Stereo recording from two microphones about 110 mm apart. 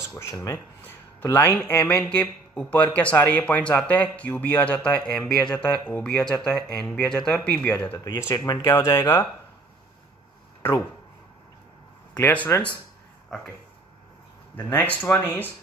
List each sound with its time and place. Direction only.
0.1 s speech: 30° left (ahead or behind); by 7.4 s 5° left (ahead or behind)
7.5 s speech: 15° left (ahead or behind)
8.3 s speech: 30° left (ahead or behind)
9.0 s speech: 20° left (ahead or behind)
12.1 s speech: 20° left (ahead or behind)
14.7 s speech: 15° left (ahead or behind)